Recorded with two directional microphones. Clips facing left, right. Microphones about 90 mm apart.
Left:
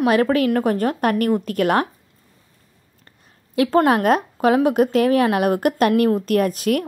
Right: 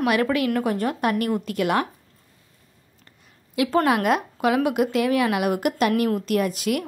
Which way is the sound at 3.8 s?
40° left (ahead or behind).